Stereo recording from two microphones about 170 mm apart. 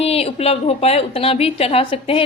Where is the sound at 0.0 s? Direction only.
35° left (ahead or behind).